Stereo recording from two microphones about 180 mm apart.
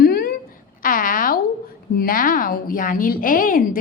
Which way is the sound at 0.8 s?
50° left (ahead or behind).